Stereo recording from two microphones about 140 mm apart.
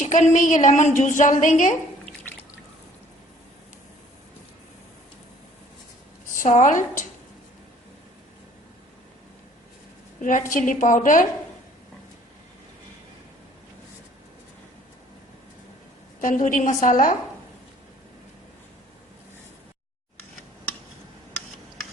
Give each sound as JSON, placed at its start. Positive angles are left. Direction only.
{"t": 0.0, "sound": "a woman's voice", "side_deg": 65}
{"t": 6.4, "sound": "a woman's voice", "side_deg": 60}
{"t": 10.2, "sound": "a woman's voice", "side_deg": 65}
{"t": 16.2, "sound": "a woman's voice", "side_deg": 65}